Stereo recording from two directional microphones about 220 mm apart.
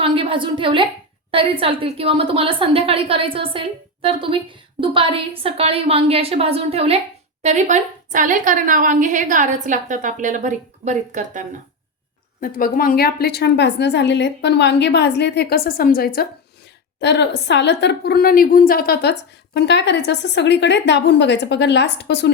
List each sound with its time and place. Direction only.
0.0 s a woman's voice: 25° right (ahead or behind)
12.4 s a woman's voice: 40° left (ahead or behind)